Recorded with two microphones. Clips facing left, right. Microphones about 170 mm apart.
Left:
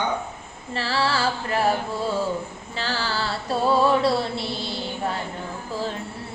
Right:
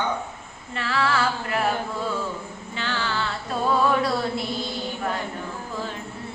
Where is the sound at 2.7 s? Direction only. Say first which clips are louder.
Left 1 dB; 35° left (ahead or behind).